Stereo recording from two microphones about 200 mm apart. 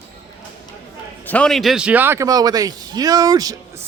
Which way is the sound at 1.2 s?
5° left (ahead or behind).